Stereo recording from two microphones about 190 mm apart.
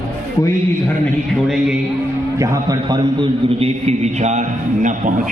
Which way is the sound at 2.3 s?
15° right (ahead or behind).